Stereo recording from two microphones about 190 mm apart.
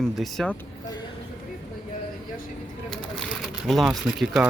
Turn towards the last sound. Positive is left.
turn(degrees=0)  # may be behind; listen again after turning